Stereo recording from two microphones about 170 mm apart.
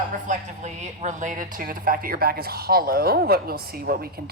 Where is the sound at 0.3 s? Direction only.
45° right (ahead or behind).